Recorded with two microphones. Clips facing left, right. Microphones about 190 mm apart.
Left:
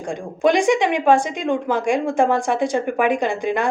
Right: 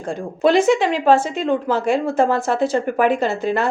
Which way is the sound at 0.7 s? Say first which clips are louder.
Right 1 dB; 15° left (ahead or behind).